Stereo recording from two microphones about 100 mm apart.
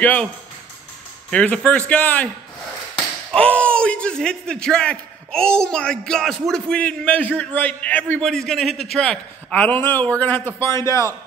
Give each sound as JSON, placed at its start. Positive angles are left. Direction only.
{"t": 0.0, "sound": "a man's voice", "side_deg": 15}
{"t": 1.3, "sound": "a man's voice", "side_deg": 10}
{"t": 3.3, "sound": "a man's voice", "side_deg": 10}
{"t": 10.7, "sound": "a man's voice", "side_deg": 30}